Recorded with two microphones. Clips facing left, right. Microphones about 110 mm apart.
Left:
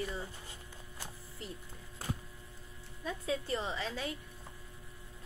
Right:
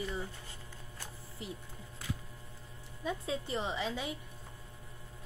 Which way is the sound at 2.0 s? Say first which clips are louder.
Left 2 dB; 40° left (ahead or behind).